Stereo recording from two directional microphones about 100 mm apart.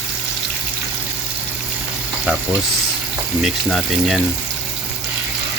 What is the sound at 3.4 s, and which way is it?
Speech, centre (ahead or behind).